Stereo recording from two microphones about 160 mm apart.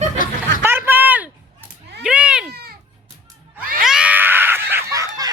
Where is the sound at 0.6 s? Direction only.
15° right (ahead or behind).